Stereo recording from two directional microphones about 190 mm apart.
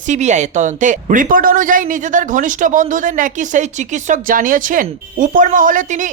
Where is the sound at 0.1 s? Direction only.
40° right (ahead or behind).